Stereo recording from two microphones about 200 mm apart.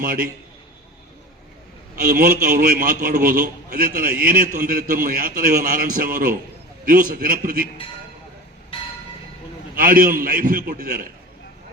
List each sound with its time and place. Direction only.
2.0 s a man's voice: 45° right (ahead or behind)
9.7 s a man's voice: 45° right (ahead or behind)